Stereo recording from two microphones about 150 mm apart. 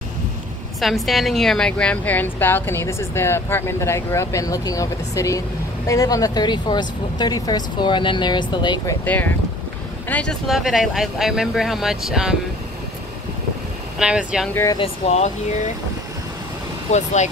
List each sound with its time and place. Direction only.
0.7 s speech: centre (ahead or behind); by 8.9 s 30° left (ahead or behind)
9.0 s speech: 10° left (ahead or behind)
13.9 s speech: 5° right (ahead or behind)
14.5 s speech: 20° left (ahead or behind)
14.8 s speech: 45° left (ahead or behind)
16.9 s speech: 50° left (ahead or behind)